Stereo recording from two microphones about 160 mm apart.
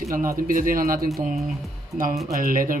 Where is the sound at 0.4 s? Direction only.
60° right (ahead or behind).